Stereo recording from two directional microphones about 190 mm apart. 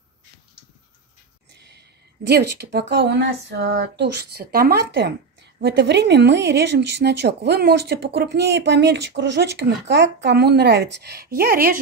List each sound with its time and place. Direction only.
1.6 s speech: 60° right (ahead or behind)